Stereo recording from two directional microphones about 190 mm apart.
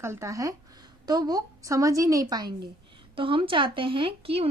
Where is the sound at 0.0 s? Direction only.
15° right (ahead or behind).